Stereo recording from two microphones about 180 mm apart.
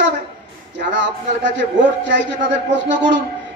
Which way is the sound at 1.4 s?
80° right.